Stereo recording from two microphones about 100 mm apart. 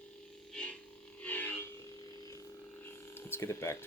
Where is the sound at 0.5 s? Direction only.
10° left (ahead or behind).